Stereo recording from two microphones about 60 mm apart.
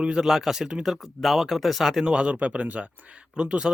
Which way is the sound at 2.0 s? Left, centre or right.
Centre.